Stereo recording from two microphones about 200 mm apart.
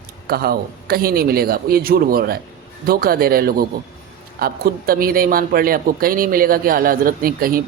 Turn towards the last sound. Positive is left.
turn(degrees=-45)  # may be behind; listen again after turning